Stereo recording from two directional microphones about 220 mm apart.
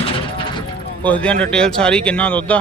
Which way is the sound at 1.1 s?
5° left (ahead or behind).